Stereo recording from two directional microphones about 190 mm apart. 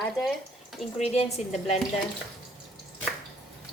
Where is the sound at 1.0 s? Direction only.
35° left (ahead or behind).